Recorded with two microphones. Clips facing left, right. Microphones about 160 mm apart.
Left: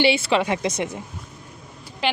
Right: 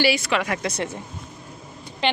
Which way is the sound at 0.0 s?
30° left (ahead or behind).